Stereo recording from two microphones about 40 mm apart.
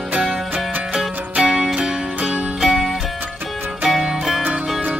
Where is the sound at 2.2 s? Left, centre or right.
Right.